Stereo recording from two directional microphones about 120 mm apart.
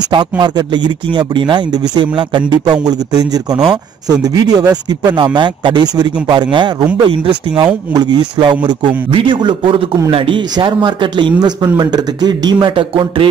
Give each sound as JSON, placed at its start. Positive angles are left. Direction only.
{"t": 0.1, "sound": "a man's voice", "side_deg": -40}